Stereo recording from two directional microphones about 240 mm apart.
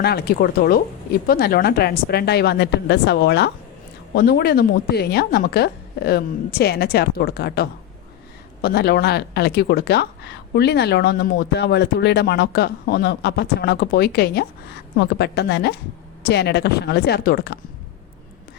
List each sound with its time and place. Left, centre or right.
0.0 s a woman's voice: left